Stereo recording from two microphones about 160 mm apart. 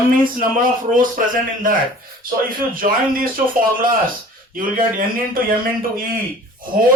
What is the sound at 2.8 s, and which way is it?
Speech, 60° right (ahead or behind).